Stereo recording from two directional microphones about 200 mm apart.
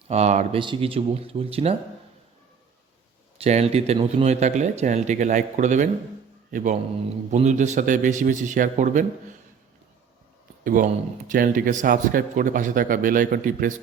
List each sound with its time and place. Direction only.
0.1 s speech: 35° right (ahead or behind)
3.3 s a man's voice: 30° right (ahead or behind)
10.6 s a man's voice: 40° right (ahead or behind)